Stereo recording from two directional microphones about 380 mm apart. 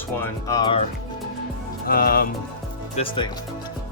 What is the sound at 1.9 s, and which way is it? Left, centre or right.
Speech, left.